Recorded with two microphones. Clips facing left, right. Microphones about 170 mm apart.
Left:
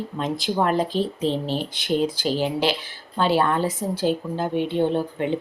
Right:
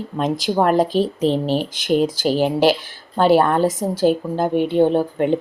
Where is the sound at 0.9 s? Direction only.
90° right.